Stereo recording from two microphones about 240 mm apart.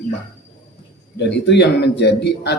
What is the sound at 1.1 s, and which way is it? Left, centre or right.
Speech, left.